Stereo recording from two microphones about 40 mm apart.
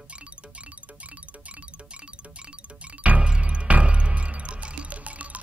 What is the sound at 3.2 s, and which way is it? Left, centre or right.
Music, right.